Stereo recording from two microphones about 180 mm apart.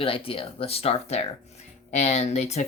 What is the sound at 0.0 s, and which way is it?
Speech, 30° left (ahead or behind).